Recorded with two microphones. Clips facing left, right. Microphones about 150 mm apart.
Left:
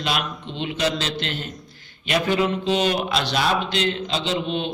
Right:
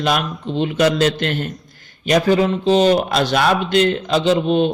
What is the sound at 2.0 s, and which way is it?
A man's voice, 40° right (ahead or behind).